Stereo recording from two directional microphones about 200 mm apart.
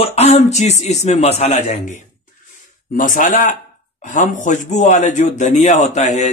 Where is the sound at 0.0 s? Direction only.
30° left (ahead or behind).